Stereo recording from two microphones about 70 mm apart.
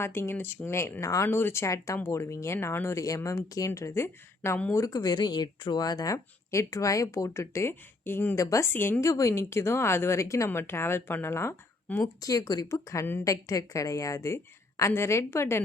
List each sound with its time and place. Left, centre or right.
0.0 s a woman's voice: left
1.6 s a woman's voice: left
3.8 s a woman's voice: left
4.7 s speech: left
6.5 s a woman's voice: left
8.4 s a woman's voice: left
8.7 s a woman's voice: left
9.0 s a woman's voice: left
9.3 s a woman's voice: left
10.5 s a woman's voice: left
12.2 s a woman's voice: left